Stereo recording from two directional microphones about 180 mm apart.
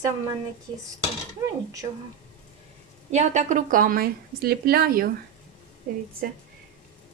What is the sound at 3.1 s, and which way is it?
A woman's voice, 40° right (ahead or behind).